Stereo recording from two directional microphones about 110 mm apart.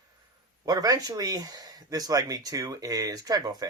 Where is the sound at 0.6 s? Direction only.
35° right (ahead or behind).